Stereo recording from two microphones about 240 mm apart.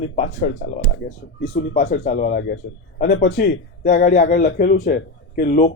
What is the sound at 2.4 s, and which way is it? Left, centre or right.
A man's voice, left.